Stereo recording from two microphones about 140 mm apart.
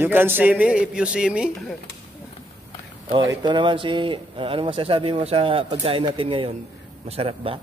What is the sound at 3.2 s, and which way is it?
Speech, 35° right (ahead or behind).